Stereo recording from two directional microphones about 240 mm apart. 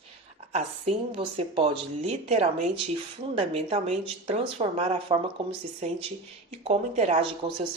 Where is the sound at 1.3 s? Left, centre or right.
Right.